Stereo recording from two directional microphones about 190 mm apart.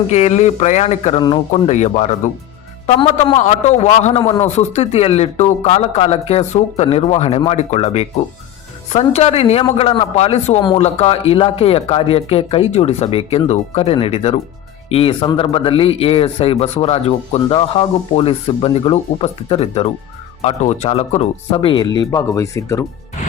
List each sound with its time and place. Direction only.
0.1 s a man's voice: 35° left (ahead or behind)
21.9 s speech: 15° left (ahead or behind)